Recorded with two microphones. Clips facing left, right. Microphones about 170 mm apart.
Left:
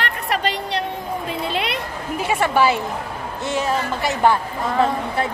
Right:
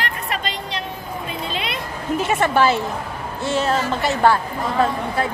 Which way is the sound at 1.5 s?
65° left (ahead or behind).